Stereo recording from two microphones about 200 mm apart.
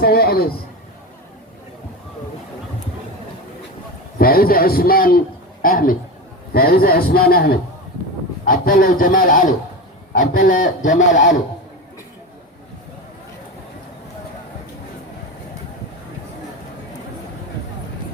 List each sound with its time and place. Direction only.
0.0 s a man's voice: 50° left (ahead or behind)
4.2 s a man's voice: 45° left (ahead or behind)